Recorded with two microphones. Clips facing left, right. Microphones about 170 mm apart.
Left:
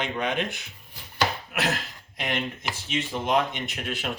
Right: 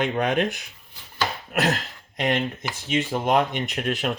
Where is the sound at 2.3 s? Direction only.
55° right (ahead or behind).